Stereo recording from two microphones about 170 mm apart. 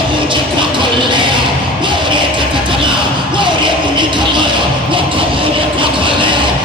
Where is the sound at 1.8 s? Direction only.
30° right (ahead or behind).